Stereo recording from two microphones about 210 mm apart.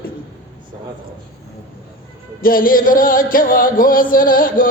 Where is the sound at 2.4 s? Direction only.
45° left (ahead or behind).